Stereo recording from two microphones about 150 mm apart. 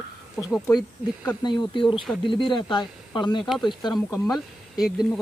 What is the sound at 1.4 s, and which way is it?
Speech, 35° left (ahead or behind).